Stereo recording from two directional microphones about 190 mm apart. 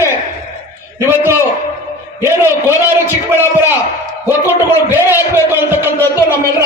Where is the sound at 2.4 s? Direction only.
10° right (ahead or behind).